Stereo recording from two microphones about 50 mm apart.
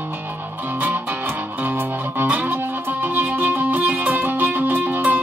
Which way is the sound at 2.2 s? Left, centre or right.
Right.